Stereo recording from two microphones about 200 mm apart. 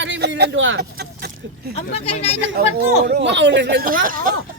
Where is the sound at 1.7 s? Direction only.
30° left (ahead or behind).